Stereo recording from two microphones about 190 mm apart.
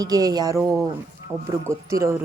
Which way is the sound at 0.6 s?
5° right (ahead or behind).